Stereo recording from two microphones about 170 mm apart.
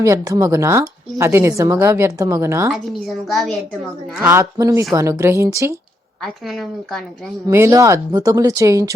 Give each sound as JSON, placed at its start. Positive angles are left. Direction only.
{"t": 0.0, "sound": "a woman's voice", "side_deg": -20}
{"t": 2.7, "sound": "a woman's voice", "side_deg": 0}
{"t": 4.3, "sound": "a woman's voice", "side_deg": -15}
{"t": 6.2, "sound": "a woman's voice", "side_deg": 0}
{"t": 7.4, "sound": "speech", "side_deg": -15}